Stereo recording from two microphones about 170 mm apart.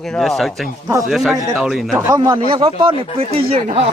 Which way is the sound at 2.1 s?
25° right (ahead or behind).